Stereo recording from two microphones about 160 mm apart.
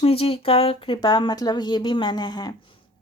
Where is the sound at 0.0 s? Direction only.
35° left (ahead or behind).